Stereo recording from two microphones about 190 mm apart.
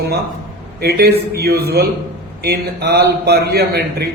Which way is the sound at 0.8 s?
55° right (ahead or behind).